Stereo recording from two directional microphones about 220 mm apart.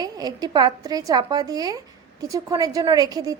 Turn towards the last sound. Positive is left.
turn(degrees=-15)  # may be behind; listen again after turning